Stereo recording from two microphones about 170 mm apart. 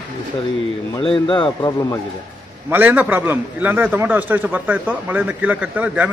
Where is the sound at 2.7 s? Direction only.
10° right (ahead or behind).